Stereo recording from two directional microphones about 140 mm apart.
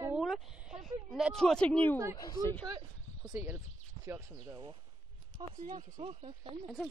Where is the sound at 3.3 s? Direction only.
15° right (ahead or behind).